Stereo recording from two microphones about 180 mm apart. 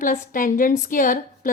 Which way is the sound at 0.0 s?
50° left (ahead or behind).